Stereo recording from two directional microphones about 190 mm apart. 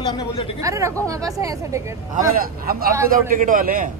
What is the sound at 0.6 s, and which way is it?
Speech, 15° right (ahead or behind).